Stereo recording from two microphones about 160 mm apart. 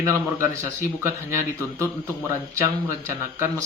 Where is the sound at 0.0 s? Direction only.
20° right (ahead or behind).